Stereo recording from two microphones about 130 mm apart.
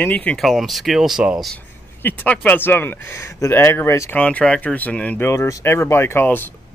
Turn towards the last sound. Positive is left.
turn(degrees=15)  # may be behind; listen again after turning